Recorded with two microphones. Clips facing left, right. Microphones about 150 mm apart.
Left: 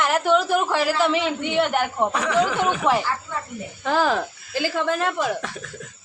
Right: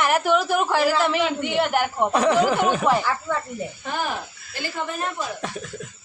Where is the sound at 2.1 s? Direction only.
30° right (ahead or behind).